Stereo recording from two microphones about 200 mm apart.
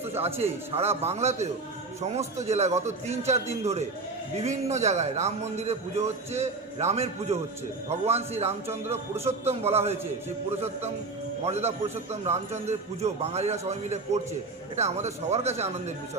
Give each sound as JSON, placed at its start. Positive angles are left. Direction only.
{"t": 0.2, "sound": "a man's voice", "side_deg": -30}
{"t": 4.4, "sound": "a man's voice", "side_deg": -35}
{"t": 8.7, "sound": "speech", "side_deg": -10}
{"t": 9.2, "sound": "a man's voice", "side_deg": -30}
{"t": 11.4, "sound": "a man's voice", "side_deg": -30}